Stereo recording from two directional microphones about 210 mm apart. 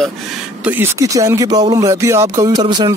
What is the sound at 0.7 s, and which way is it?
Speech, 10° right (ahead or behind).